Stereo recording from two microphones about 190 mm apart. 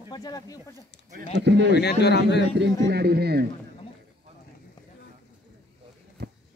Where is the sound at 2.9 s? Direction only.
60° right (ahead or behind).